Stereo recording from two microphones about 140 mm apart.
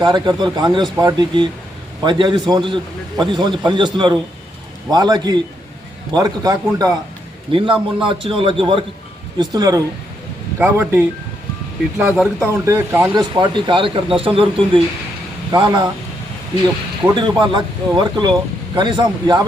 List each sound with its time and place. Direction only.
0.0 s speech: 30° right (ahead or behind)
7.5 s speech: 40° right (ahead or behind)
10.6 s speech: 15° right (ahead or behind)
12.4 s speech: 20° right (ahead or behind)
13.1 s speech: 35° right (ahead or behind)
17.2 s speech: 35° right (ahead or behind)